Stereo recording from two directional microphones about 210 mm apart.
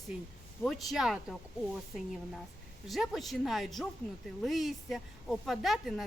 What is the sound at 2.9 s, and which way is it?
A woman's voice, centre (ahead or behind).